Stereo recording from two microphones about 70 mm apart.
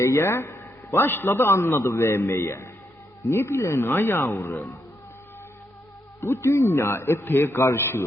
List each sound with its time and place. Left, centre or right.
0.0 s a man's voice: left
6.1 s a man's voice: left